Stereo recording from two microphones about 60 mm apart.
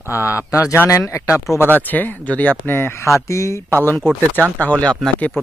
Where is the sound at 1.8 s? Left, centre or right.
Left.